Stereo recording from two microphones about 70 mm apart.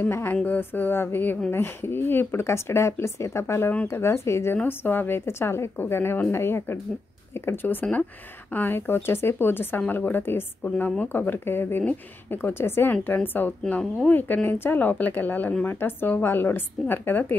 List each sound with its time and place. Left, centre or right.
0.0 s a woman's voice: left
4.6 s a woman's voice: left